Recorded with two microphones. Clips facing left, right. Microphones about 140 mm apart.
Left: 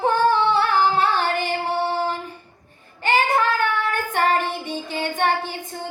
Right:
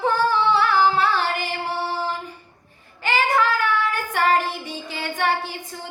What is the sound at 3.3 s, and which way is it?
Child singing, 50° left (ahead or behind).